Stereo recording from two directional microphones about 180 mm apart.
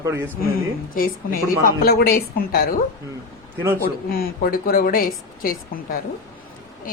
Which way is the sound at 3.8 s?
55° left (ahead or behind).